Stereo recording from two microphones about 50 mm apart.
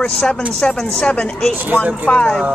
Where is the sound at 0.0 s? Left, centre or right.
Centre.